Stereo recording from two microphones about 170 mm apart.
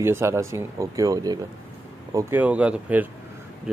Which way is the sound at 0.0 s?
15° right (ahead or behind).